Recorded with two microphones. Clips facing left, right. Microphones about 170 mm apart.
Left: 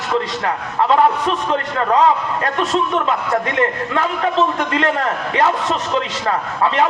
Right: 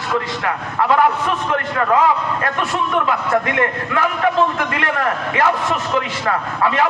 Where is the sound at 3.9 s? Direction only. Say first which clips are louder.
Right 3 dB; 25° left (ahead or behind).